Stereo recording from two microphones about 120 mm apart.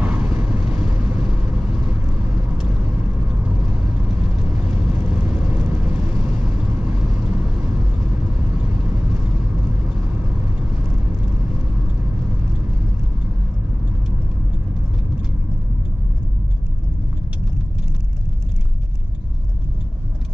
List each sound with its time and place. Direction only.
0.0 s vehicle: 10° right (ahead or behind)
3.2 s vehicle: 10° right (ahead or behind)